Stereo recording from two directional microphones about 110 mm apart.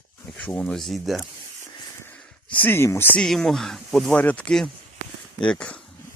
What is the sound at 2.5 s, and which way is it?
Speech, 20° left (ahead or behind).